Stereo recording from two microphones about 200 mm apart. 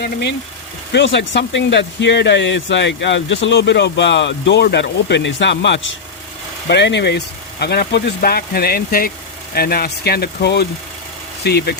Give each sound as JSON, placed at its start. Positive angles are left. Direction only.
{"t": 0.0, "sound": "speech", "side_deg": 55}